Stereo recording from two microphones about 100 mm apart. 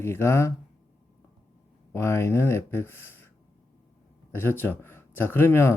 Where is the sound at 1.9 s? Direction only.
25° left (ahead or behind).